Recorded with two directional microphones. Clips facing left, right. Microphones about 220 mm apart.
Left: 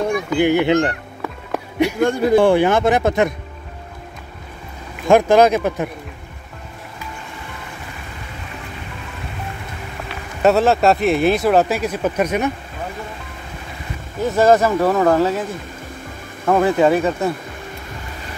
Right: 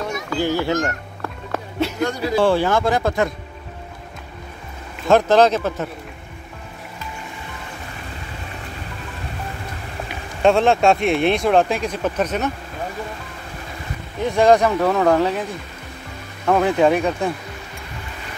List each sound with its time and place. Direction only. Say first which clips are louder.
0.3 s speech: left 5 dB; 20° left (ahead or behind)
1.2 s music: left 2 dB; 15° left (ahead or behind)
2.0 s speech: left 8 dB; 50° left (ahead or behind)
2.3 s speech: left 3 dB; 15° left (ahead or behind)
5.0 s speech: left 2 dB; 10° left (ahead or behind)
10.4 s speech: left 1 dB; 5° left (ahead or behind)
14.2 s speech: left 1 dB; 5° left (ahead or behind)
16.4 s speech: left 1 dB; centre (ahead or behind)